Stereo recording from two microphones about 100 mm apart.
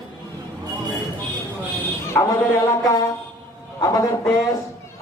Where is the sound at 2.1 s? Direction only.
25° left (ahead or behind).